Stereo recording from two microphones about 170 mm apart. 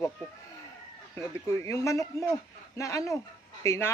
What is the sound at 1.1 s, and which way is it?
Speech, 15° left (ahead or behind).